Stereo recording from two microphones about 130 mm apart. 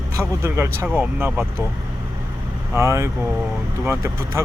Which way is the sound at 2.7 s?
20° right (ahead or behind).